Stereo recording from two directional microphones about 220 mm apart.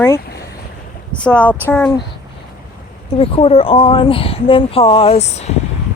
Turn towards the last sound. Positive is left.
turn(degrees=30)  # may be behind; listen again after turning